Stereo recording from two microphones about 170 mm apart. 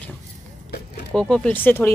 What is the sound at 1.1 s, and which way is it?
Speech, 5° left (ahead or behind).